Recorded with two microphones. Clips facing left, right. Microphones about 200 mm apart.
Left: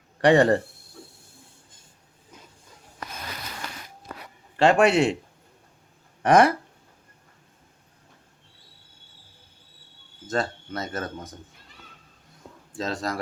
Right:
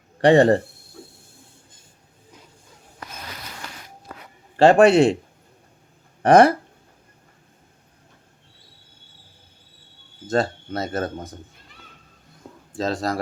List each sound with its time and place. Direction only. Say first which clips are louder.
0.2 s speech: right 3 dB; 25° right (ahead or behind)
4.8 s speech: right 6 dB; 35° right (ahead or behind)
6.2 s speech: right 4 dB; 30° right (ahead or behind)
10.2 s speech: right 5 dB; 35° right (ahead or behind)
12.7 s speech: right 5 dB; 35° right (ahead or behind)